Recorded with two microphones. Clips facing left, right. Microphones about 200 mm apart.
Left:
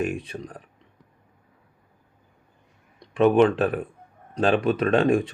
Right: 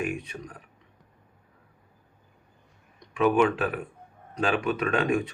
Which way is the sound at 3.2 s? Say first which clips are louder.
Left 5 dB; 35° left (ahead or behind).